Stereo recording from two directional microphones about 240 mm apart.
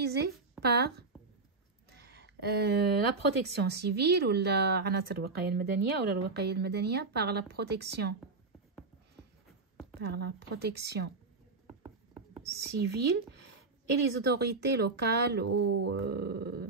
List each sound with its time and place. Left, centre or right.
0.0 s a woman's voice: right
9.9 s speech: right
11.6 s patter: centre
12.7 s speech: right
15.4 s speech: right
16.0 s speech: right